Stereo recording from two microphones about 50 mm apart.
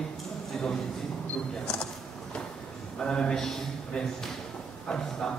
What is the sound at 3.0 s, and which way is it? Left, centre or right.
A man's voice, centre.